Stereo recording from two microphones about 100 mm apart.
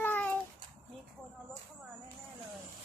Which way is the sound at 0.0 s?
15° left (ahead or behind).